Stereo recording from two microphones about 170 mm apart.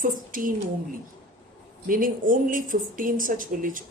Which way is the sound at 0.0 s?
55° right (ahead or behind).